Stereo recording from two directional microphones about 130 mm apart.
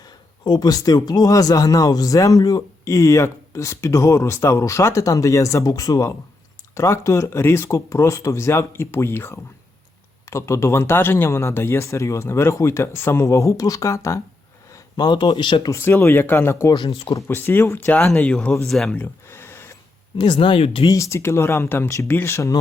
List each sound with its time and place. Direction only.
0.0 s speech: 30° left (ahead or behind)
15.7 s speech: 20° left (ahead or behind)
17.2 s speech: 15° left (ahead or behind)
18.9 s a sound: 15° left (ahead or behind)
20.1 s speech: 35° left (ahead or behind)
20.8 s speech: 25° left (ahead or behind)